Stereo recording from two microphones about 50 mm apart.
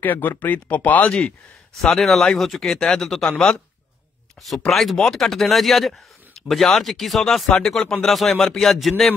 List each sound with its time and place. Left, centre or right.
0.0 s speech: left
1.8 s speech: centre